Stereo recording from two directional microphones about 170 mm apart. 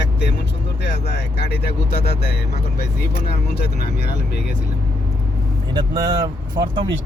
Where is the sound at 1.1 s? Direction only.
75° left (ahead or behind).